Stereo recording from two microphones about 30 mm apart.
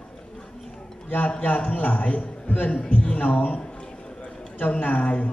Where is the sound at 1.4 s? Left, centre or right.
Left.